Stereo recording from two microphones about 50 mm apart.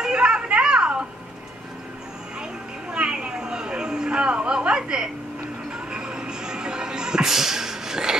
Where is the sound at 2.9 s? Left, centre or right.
Centre.